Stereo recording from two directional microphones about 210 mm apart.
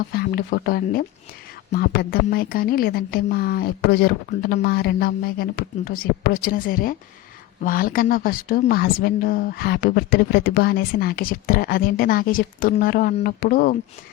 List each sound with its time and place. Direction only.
0.1 s a woman's voice: 45° left (ahead or behind)